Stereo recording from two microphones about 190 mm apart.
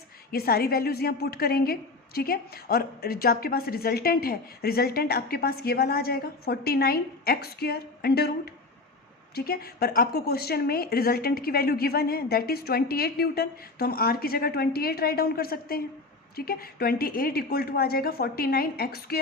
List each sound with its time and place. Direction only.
0.3 s a woman's voice: 55° left (ahead or behind)